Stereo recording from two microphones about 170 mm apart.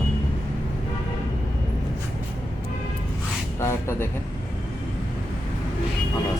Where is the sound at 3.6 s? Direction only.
15° left (ahead or behind).